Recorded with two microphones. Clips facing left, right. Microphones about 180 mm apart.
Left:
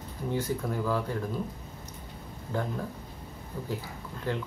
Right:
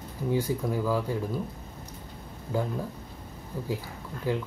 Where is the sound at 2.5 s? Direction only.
10° right (ahead or behind).